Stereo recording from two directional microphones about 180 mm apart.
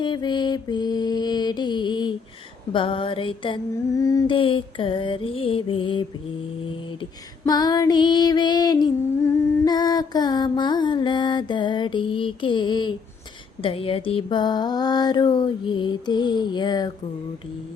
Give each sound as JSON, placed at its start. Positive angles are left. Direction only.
{"t": 0.0, "sound": "female singing", "side_deg": 25}